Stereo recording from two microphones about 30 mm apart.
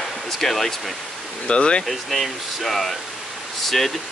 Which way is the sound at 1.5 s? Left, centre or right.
Left.